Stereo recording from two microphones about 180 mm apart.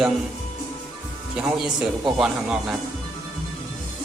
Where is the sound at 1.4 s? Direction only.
5° right (ahead or behind).